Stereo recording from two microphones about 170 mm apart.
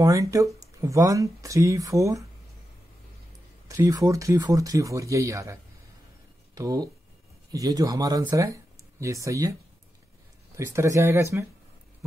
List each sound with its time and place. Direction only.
0.0 s speech: 20° right (ahead or behind)
3.6 s speech: 20° right (ahead or behind)